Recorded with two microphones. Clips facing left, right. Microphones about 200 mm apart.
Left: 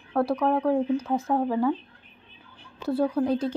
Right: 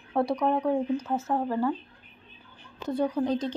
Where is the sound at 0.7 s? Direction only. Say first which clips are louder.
Left 3 dB; 10° left (ahead or behind).